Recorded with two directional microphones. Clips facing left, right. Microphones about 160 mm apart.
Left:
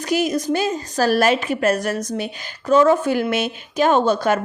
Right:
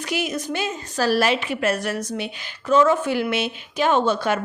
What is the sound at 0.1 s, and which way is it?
A woman's voice, 40° left (ahead or behind).